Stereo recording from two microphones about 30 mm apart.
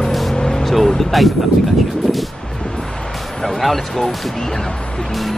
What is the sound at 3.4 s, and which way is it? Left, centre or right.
Speech, centre.